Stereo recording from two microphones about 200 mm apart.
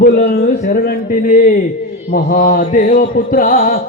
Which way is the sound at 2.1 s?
45° left (ahead or behind).